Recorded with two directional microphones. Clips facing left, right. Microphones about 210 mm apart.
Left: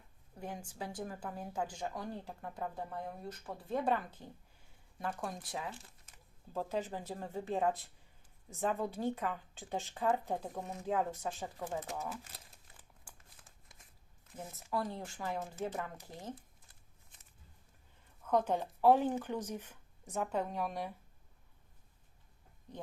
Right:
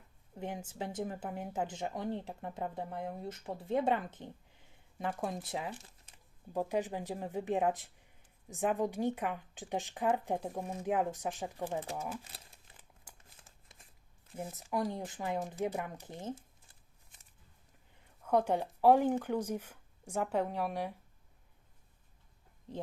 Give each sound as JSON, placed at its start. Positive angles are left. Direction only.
{"t": 0.3, "sound": "a woman's voice", "side_deg": -20}
{"t": 11.6, "sound": "speech", "side_deg": -30}
{"t": 14.3, "sound": "a woman's voice", "side_deg": -15}
{"t": 18.3, "sound": "a woman's voice", "side_deg": -10}